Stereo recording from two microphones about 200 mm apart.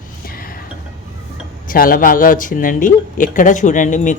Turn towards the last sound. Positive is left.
turn(degrees=40)  # may be behind; listen again after turning